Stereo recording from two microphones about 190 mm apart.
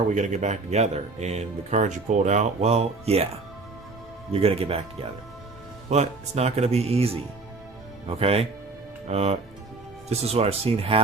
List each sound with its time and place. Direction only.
0.1 s speech: 40° right (ahead or behind)
4.3 s speech: 30° right (ahead or behind)